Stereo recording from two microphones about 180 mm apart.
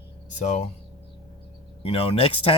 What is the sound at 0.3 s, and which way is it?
Speech, 40° left (ahead or behind).